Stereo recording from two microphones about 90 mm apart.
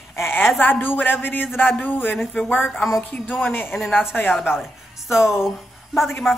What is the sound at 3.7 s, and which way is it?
A woman's voice, 5° right (ahead or behind).